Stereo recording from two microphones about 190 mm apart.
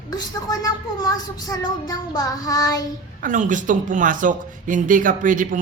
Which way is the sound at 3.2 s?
45° right (ahead or behind).